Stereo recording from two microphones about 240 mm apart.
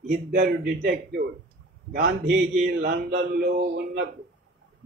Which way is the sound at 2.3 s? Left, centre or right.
Right.